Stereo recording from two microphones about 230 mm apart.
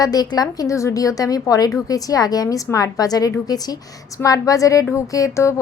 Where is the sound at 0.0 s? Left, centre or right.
Centre.